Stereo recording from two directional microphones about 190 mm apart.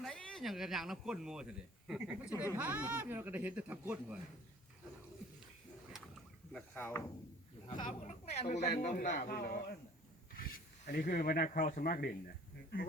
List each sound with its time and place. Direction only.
0.0 s speech: 5° left (ahead or behind)
6.5 s speech: 5° left (ahead or behind)
7.8 s a man's voice: 40° left (ahead or behind)
10.8 s a man's voice: 45° left (ahead or behind)